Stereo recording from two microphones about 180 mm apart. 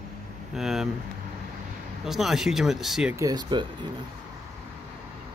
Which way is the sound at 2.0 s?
Centre (ahead or behind).